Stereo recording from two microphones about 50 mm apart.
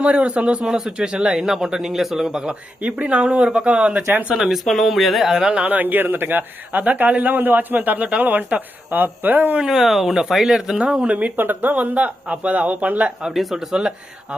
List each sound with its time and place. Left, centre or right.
0.0 s speech: right
2.8 s speech: right
4.3 s speech: centre
4.6 s speech: centre
5.6 s speech: right
9.6 s speech: centre
11.3 s speech: right
13.3 s speech: centre